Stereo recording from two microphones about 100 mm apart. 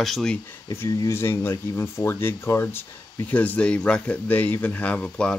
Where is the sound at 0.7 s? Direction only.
30° left (ahead or behind).